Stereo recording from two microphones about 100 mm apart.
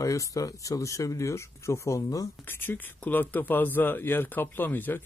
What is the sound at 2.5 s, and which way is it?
Speech, 20° left (ahead or behind).